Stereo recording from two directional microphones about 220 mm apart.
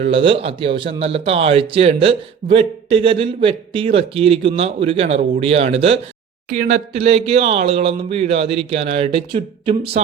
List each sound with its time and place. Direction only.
0.0 s speech: 25° right (ahead or behind)